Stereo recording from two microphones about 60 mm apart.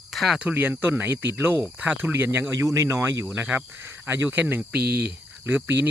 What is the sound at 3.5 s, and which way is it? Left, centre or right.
Speech, right.